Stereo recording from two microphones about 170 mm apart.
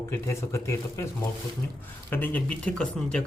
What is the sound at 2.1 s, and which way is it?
Speech, 10° left (ahead or behind).